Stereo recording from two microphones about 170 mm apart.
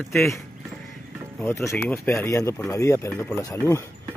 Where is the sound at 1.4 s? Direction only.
15° left (ahead or behind).